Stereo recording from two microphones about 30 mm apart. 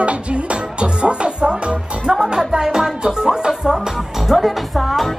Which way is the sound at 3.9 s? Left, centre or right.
Centre.